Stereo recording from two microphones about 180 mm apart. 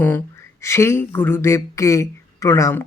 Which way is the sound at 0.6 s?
15° left (ahead or behind).